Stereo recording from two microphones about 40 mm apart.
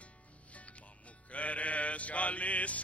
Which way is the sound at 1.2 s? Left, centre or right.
Left.